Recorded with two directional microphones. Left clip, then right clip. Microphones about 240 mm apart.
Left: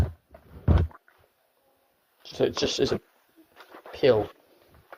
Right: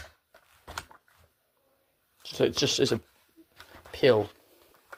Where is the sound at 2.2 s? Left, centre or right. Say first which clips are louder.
Left 1 dB; right.